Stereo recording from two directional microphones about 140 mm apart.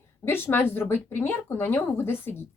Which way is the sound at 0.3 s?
15° left (ahead or behind).